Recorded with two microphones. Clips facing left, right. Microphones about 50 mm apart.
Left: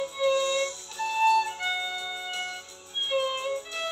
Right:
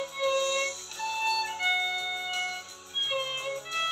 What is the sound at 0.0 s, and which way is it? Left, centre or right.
Music, right.